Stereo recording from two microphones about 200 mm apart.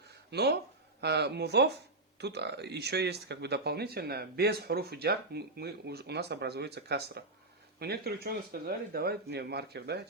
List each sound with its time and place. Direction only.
0.3 s speech: 55° right (ahead or behind)